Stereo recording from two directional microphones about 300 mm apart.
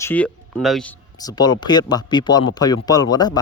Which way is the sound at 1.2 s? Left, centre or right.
Centre.